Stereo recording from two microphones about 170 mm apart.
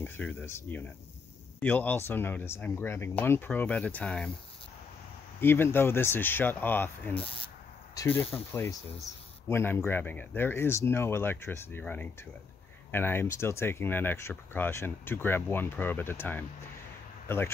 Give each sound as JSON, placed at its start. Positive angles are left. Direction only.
{"t": 0.0, "sound": "speech", "side_deg": 10}
{"t": 5.4, "sound": "speech", "side_deg": 15}
{"t": 7.2, "sound": "speech", "side_deg": 30}
{"t": 7.9, "sound": "speech", "side_deg": 15}
{"t": 9.5, "sound": "speech", "side_deg": 15}